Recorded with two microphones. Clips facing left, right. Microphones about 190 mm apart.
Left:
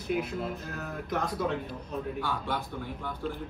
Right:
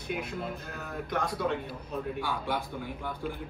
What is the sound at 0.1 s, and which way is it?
Speech, centre (ahead or behind).